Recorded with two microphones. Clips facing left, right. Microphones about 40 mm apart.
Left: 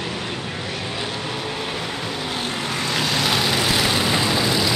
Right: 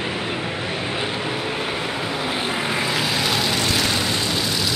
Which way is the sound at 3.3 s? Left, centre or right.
Centre.